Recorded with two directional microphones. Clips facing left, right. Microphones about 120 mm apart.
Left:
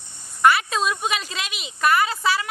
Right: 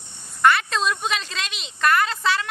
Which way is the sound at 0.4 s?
5° left (ahead or behind).